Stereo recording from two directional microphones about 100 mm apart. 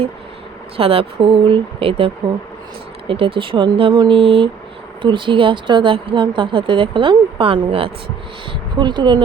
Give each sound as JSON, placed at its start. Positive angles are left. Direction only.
{"t": 0.8, "sound": "speech", "side_deg": -70}
{"t": 5.0, "sound": "speech", "side_deg": -55}
{"t": 8.8, "sound": "speech", "side_deg": -50}